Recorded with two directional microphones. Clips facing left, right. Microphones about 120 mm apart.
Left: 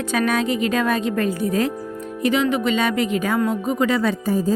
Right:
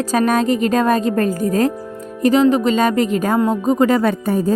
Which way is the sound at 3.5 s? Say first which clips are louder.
Right 5 dB; 40° right (ahead or behind).